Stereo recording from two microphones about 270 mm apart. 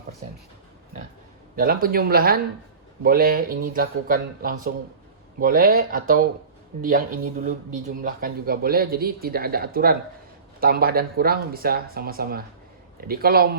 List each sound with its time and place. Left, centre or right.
1.5 s speech: right
8.0 s speech: right